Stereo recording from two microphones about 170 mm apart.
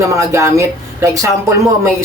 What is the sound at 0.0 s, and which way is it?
Speech, 15° right (ahead or behind).